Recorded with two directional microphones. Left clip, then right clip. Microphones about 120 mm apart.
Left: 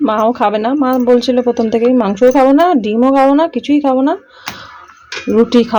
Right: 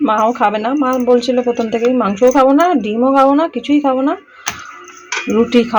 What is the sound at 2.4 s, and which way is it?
Speech, 45° left (ahead or behind).